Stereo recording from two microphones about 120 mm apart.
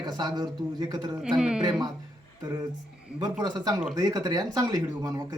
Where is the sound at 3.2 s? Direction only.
35° right (ahead or behind).